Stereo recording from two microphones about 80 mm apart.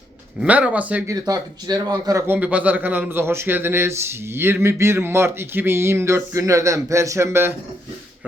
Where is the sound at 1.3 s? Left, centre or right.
Right.